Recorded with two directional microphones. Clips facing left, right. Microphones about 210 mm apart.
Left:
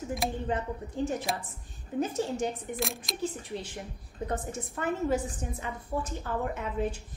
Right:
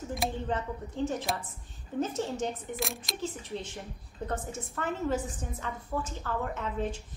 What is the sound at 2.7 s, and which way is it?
Speech, centre (ahead or behind).